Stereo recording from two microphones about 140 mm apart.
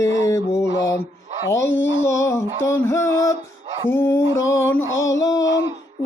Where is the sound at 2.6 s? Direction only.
20° left (ahead or behind).